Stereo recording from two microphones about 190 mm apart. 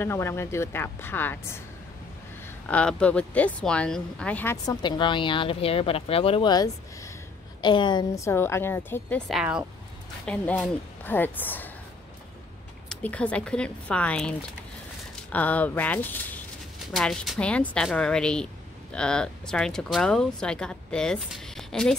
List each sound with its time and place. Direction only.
0.0 s speech: 15° left (ahead or behind)
4.8 s speech: 25° left (ahead or behind)
9.3 s speech: 5° right (ahead or behind)
10.2 s speech: 10° left (ahead or behind)
12.9 s speech: 5° left (ahead or behind)
15.3 s speech: 10° left (ahead or behind)